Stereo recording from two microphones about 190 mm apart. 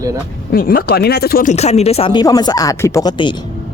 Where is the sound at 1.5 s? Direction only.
35° left (ahead or behind).